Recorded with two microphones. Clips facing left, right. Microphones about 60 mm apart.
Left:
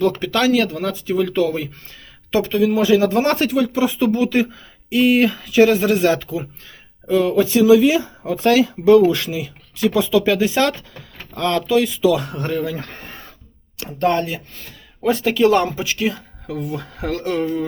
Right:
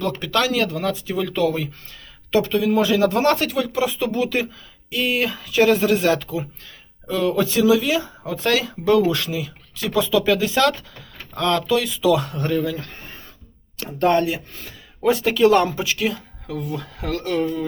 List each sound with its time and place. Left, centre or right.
0.0 s speech: centre
13.8 s speech: centre; by 17.4 s left